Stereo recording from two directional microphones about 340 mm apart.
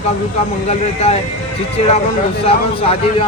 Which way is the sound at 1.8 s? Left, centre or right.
Centre.